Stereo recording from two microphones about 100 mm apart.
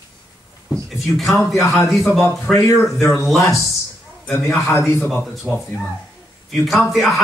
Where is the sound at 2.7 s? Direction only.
Centre (ahead or behind).